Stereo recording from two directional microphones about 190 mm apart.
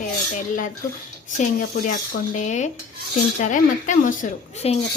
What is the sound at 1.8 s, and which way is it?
Speech, 40° left (ahead or behind).